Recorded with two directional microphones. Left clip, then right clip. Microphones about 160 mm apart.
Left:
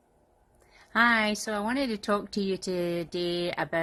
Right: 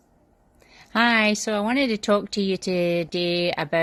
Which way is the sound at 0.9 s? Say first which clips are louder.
Right 4 dB; 25° right (ahead or behind).